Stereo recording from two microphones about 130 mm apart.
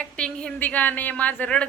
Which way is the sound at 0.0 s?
5° left (ahead or behind).